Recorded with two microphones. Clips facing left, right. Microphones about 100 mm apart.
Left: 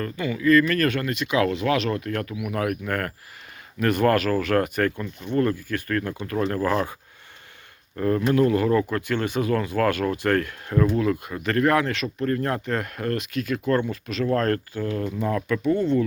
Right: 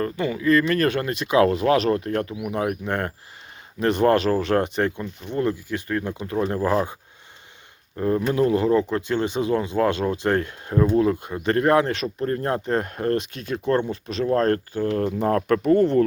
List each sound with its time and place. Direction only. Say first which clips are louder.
0.0 s speech: right 1 dB; 30° right (ahead or behind)
7.9 s speech: left 1 dB; 20° right (ahead or behind)
14.8 s speech: right 4 dB; 50° right (ahead or behind)